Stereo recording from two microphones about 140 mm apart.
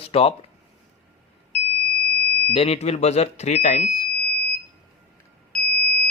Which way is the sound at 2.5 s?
45° left (ahead or behind).